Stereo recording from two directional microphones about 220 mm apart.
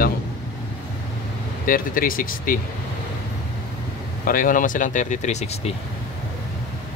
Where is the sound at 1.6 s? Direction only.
40° left (ahead or behind).